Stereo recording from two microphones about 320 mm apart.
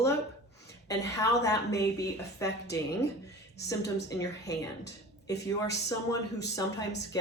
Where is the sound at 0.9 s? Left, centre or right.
Centre.